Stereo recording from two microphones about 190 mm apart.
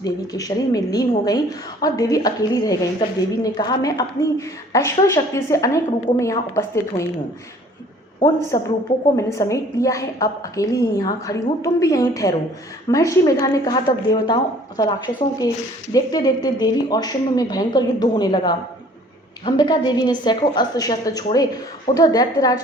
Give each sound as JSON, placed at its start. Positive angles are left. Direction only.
{"t": 0.0, "sound": "a woman's voice", "side_deg": 20}
{"t": 8.5, "sound": "a woman's voice", "side_deg": 20}